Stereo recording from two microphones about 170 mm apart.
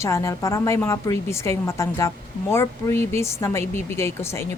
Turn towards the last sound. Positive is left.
turn(degrees=15)  # may be behind; listen again after turning